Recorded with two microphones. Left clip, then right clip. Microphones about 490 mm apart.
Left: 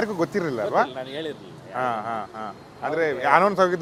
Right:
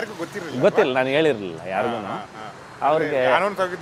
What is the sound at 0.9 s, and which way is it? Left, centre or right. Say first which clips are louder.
Speech: right 13 dB; right.